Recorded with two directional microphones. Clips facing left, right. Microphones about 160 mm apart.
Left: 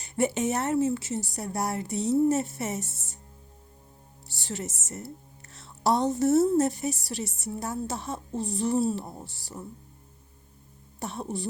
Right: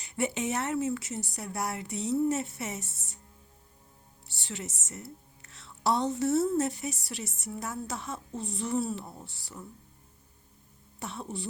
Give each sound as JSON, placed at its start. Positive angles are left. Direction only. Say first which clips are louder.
{"t": 0.0, "sound": "a woman's voice", "louder": "left 5 dB", "side_deg": 40}
{"t": 0.9, "sound": "speech", "louder": "left 4 dB", "side_deg": 30}
{"t": 4.3, "sound": "speech", "louder": "left 5 dB", "side_deg": 40}
{"t": 11.0, "sound": "speech", "louder": "left 4 dB", "side_deg": 40}